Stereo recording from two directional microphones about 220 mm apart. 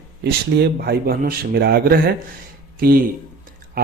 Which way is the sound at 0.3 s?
45° right (ahead or behind).